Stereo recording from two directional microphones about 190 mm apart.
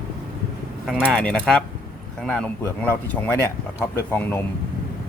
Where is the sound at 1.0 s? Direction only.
5° left (ahead or behind).